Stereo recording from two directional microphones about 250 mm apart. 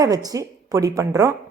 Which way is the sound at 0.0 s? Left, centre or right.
Centre.